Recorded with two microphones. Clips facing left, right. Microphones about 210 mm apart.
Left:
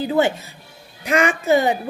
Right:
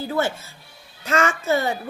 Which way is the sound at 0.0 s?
15° left (ahead or behind).